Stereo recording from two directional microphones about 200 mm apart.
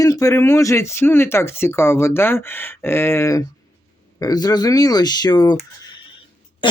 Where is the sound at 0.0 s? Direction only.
15° left (ahead or behind).